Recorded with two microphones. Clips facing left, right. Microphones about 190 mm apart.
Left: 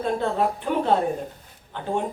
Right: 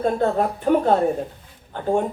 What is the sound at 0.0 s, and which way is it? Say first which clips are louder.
Speech: right 3 dB; 45° right (ahead or behind).